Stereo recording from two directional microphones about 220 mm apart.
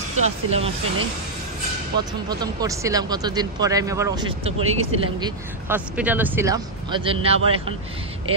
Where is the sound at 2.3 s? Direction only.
15° right (ahead or behind).